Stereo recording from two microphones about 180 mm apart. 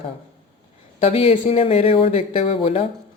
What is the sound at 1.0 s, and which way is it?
Speech, 30° left (ahead or behind).